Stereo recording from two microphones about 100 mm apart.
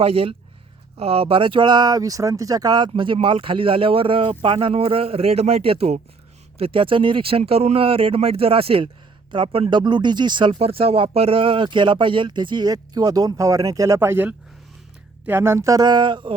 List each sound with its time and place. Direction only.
0.0 s speech: 70° right (ahead or behind)
6.6 s speech: 65° right (ahead or behind); by 10.6 s 50° right (ahead or behind)
10.6 s speech: 75° right (ahead or behind); by 16.3 s 55° right (ahead or behind)